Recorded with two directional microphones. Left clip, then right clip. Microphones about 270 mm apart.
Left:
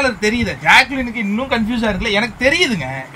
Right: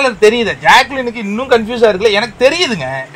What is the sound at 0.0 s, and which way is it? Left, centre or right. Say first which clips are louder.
Speech: right 7 dB; centre.